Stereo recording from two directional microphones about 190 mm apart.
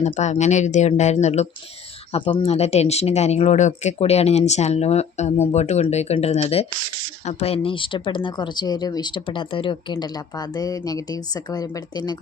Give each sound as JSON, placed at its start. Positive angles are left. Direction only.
{"t": 0.0, "sound": "speech", "side_deg": 35}